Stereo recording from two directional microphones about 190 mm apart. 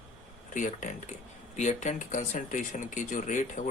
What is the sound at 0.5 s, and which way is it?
Speech, 40° left (ahead or behind).